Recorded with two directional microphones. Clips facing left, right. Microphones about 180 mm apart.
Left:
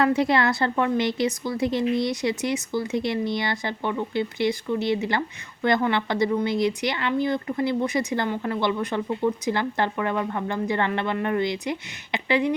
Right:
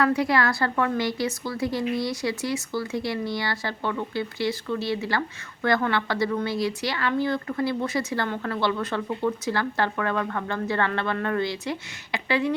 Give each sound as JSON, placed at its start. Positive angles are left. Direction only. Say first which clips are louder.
{"t": 0.0, "sound": "speech", "louder": "left 2 dB", "side_deg": 25}